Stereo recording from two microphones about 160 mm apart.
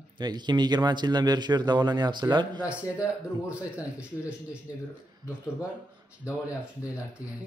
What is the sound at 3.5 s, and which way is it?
A man's voice, 5° right (ahead or behind).